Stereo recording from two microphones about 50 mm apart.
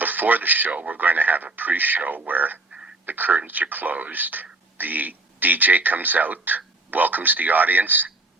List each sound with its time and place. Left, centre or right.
0.0 s speech: right